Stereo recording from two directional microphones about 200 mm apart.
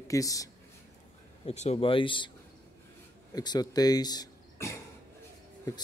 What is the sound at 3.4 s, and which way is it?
Speech, 20° left (ahead or behind).